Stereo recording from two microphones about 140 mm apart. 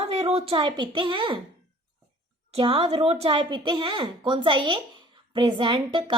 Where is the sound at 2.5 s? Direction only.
45° right (ahead or behind).